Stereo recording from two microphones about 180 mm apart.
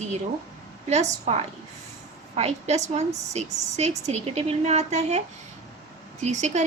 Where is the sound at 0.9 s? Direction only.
40° right (ahead or behind).